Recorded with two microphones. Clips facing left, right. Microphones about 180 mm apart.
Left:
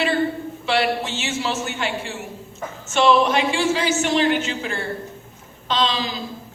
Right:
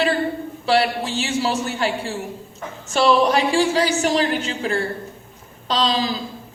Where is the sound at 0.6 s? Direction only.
35° right (ahead or behind).